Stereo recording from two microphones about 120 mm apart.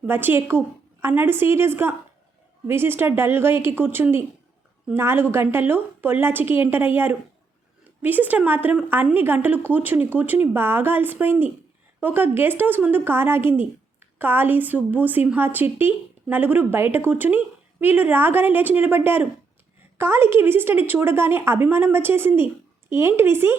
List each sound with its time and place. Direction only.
0.0 s a woman's voice: 15° right (ahead or behind)